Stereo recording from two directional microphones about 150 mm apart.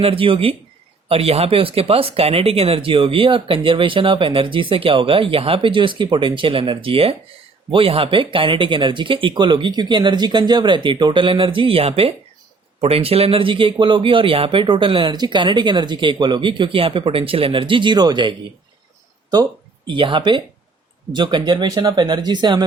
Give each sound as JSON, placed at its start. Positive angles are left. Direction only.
{"t": 0.0, "sound": "speech", "side_deg": -40}
{"t": 19.9, "sound": "speech", "side_deg": -35}